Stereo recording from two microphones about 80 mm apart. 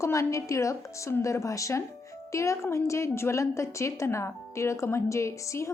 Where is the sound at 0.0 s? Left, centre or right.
Left.